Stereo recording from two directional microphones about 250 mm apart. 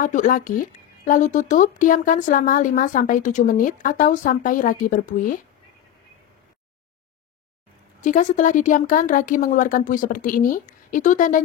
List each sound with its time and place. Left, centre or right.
0.0 s speech: left
8.0 s speech: left